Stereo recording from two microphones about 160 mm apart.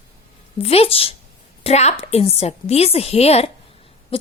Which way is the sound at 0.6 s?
40° left (ahead or behind).